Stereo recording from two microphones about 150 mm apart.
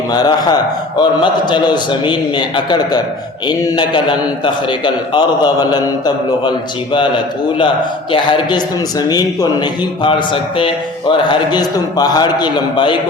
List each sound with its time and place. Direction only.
0.1 s a man's voice: 25° left (ahead or behind)
8.1 s a man's voice: 30° left (ahead or behind)